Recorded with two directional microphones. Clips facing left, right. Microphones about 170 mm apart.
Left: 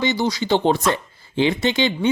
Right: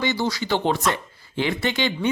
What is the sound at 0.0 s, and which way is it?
Speech, 20° left (ahead or behind).